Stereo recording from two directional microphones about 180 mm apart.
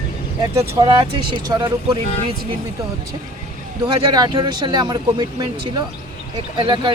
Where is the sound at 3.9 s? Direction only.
25° right (ahead or behind).